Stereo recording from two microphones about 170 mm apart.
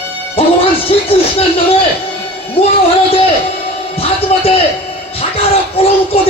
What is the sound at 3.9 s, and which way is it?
A man's voice, 35° left (ahead or behind).